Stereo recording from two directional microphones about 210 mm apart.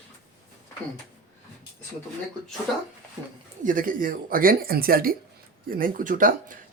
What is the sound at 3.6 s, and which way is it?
Speech, 40° right (ahead or behind).